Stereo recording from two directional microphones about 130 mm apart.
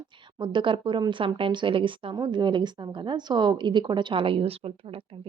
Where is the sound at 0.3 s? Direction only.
35° right (ahead or behind).